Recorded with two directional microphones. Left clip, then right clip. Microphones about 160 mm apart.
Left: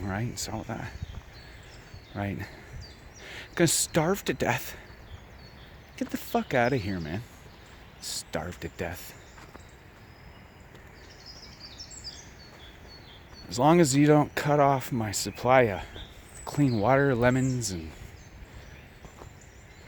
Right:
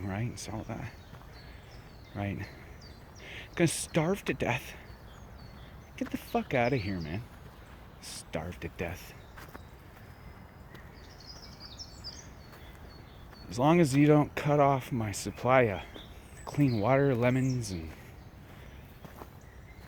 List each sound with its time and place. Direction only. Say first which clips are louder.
0.0 s speech: left 5 dB; 40° left (ahead or behind)
2.1 s speech: left 3 dB; 40° left (ahead or behind)
3.5 s speech: left 4 dB; 40° left (ahead or behind)
6.0 s speech: left 3 dB; 35° left (ahead or behind)
8.4 s speech: even; 35° left (ahead or behind)
13.6 s speech: left 4 dB; 40° left (ahead or behind)